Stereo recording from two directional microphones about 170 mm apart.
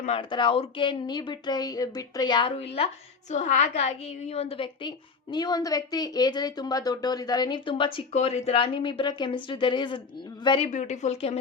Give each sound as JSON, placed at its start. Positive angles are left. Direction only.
{"t": 0.2, "sound": "a woman's voice", "side_deg": 30}
{"t": 10.7, "sound": "speech", "side_deg": 45}